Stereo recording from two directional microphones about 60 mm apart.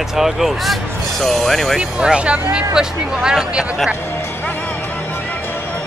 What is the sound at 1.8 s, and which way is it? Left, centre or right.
Speech, centre.